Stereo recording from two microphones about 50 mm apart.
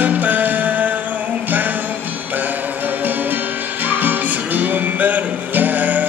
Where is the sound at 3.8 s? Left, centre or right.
Right.